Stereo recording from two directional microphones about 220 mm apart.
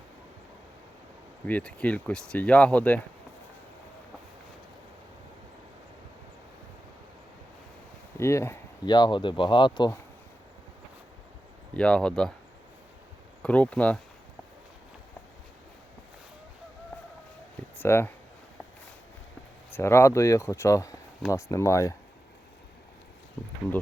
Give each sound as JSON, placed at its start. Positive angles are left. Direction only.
{"t": 1.5, "sound": "speech", "side_deg": 5}
{"t": 8.2, "sound": "speech", "side_deg": 10}
{"t": 11.7, "sound": "speech", "side_deg": 5}
{"t": 13.4, "sound": "speech", "side_deg": 5}
{"t": 17.7, "sound": "speech", "side_deg": 10}
{"t": 19.7, "sound": "speech", "side_deg": 10}